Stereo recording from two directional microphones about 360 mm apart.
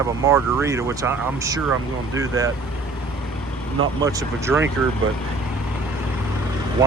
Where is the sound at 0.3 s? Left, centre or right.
Centre.